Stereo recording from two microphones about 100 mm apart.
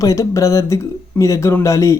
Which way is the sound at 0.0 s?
35° left (ahead or behind).